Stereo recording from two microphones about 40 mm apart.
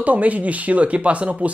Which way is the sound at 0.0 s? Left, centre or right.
Right.